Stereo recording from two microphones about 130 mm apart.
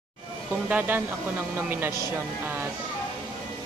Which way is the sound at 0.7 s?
10° right (ahead or behind).